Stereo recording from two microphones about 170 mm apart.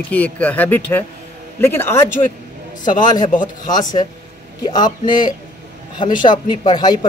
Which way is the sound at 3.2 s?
50° left (ahead or behind).